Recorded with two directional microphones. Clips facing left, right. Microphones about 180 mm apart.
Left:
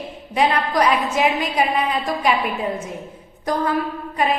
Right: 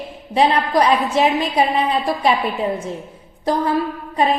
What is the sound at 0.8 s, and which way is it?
A woman's voice, 30° right (ahead or behind).